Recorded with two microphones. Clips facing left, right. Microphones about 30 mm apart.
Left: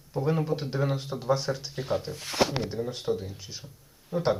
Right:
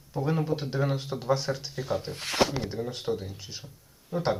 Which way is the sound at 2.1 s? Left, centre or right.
Right.